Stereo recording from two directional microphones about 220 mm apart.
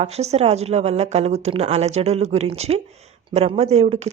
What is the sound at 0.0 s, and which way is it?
A woman's voice, 30° right (ahead or behind).